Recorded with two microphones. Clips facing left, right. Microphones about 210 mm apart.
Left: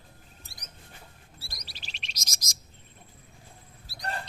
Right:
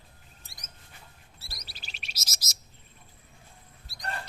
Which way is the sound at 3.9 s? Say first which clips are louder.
Left 6 dB; centre (ahead or behind).